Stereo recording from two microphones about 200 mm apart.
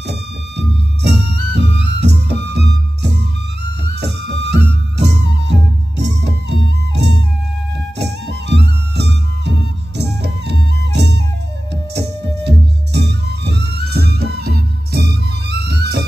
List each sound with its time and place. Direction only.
0.0 s music: 60° right (ahead or behind)